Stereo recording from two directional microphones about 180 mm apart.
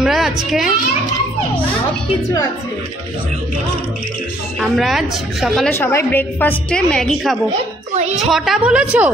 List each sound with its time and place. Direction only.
0.0 s a child's voice: centre (ahead or behind)
4.6 s a woman's voice: centre (ahead or behind)
5.8 s a woman's voice: 15° left (ahead or behind)
7.9 s a sound: 35° right (ahead or behind)
8.3 s a woman's voice: centre (ahead or behind)